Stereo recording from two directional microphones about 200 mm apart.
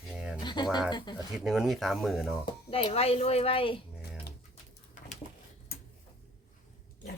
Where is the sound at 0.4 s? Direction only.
20° left (ahead or behind).